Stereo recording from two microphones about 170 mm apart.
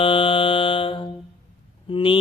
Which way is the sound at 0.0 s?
30° left (ahead or behind).